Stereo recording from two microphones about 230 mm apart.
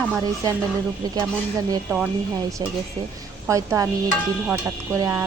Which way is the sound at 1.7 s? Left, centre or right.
Centre.